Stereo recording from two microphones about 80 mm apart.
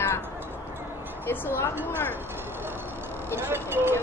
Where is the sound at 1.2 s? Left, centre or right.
Left.